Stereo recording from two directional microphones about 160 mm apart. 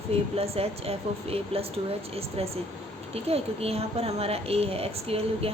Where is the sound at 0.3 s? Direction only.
40° right (ahead or behind).